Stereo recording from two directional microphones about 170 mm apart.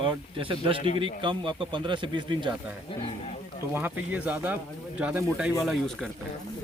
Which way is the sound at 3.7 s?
10° right (ahead or behind).